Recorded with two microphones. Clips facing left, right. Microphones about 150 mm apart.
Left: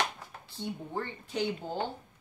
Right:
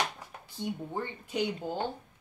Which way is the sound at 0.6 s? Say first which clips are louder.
Right 1 dB; 15° right (ahead or behind).